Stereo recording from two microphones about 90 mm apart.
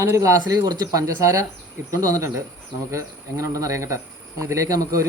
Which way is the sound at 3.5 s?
35° right (ahead or behind).